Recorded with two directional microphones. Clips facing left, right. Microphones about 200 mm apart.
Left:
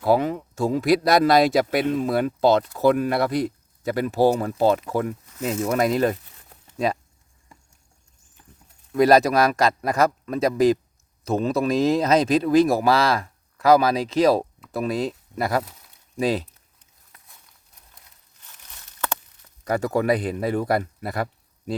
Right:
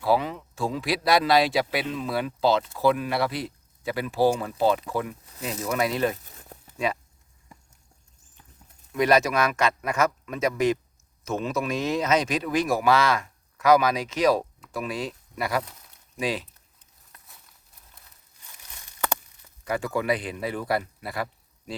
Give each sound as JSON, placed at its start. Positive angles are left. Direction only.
{"t": 0.0, "sound": "speech", "side_deg": 50}
{"t": 8.9, "sound": "speech", "side_deg": 35}
{"t": 18.4, "sound": "a sound", "side_deg": -10}
{"t": 19.6, "sound": "speech", "side_deg": 40}